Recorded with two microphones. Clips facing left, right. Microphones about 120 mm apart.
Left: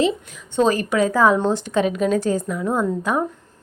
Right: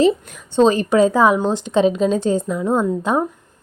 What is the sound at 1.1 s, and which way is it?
A woman's voice, 15° right (ahead or behind).